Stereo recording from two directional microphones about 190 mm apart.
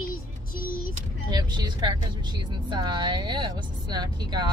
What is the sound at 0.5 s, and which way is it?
Vehicle, 50° left (ahead or behind).